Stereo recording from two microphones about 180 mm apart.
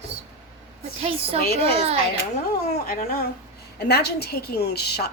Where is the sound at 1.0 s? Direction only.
35° right (ahead or behind).